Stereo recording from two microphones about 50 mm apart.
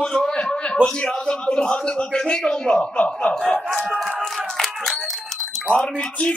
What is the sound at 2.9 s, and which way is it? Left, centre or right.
Speech, left.